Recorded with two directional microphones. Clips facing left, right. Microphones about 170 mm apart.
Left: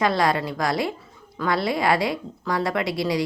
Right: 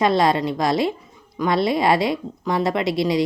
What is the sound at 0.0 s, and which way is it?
A woman's voice, 25° right (ahead or behind).